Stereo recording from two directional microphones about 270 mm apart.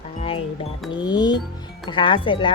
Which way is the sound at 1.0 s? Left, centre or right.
Centre.